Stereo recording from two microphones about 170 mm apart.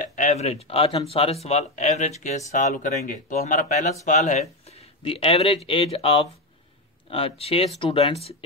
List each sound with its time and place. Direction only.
0.0 s speech: 45° left (ahead or behind)